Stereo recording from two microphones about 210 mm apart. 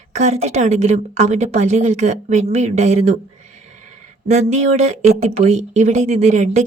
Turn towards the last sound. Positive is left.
turn(degrees=-35)  # may be behind; listen again after turning